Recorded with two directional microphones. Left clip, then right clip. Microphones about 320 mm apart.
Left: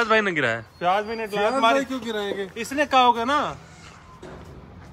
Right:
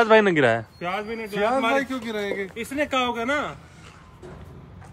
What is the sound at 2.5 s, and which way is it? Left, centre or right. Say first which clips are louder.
Speech: left 7 dB; centre.